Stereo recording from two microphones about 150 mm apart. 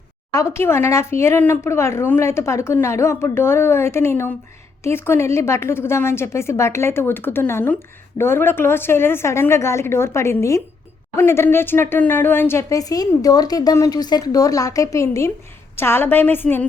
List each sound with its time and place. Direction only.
0.3 s speech: 20° left (ahead or behind)